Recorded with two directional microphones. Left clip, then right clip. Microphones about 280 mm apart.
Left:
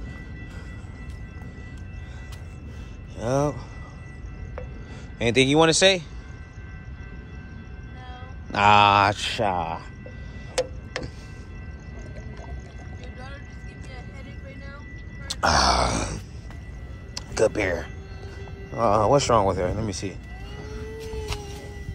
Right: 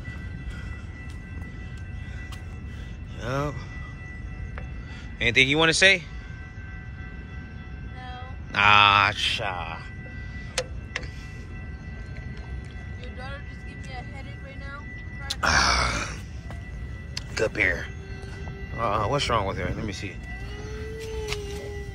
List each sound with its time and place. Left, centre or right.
3.2 s speech: centre
5.2 s speech: centre
8.5 s speech: centre
15.2 s music: centre
17.1 s speech: centre
20.6 s vehicle: centre